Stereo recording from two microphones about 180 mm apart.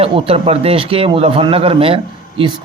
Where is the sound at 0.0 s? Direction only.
35° right (ahead or behind).